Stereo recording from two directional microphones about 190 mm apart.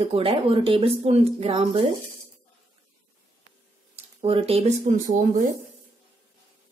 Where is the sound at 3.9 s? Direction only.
30° right (ahead or behind).